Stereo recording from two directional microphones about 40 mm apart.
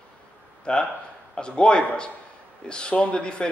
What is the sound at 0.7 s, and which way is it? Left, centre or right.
Speech, left.